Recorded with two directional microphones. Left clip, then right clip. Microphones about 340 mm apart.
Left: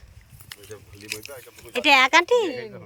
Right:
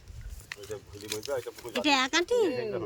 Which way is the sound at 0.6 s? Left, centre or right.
Centre.